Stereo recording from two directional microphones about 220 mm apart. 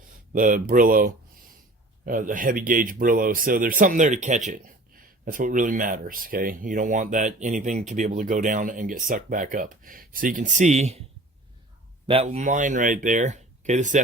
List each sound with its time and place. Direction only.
0.3 s speech: 40° right (ahead or behind)
12.0 s speech: 25° right (ahead or behind)